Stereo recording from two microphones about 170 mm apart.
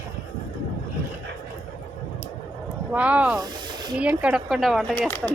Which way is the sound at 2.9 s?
10° right (ahead or behind).